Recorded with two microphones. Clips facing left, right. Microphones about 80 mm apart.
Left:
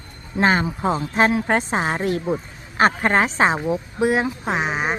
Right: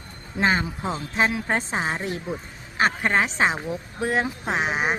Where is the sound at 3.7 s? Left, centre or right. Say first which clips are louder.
Left 7 dB; centre.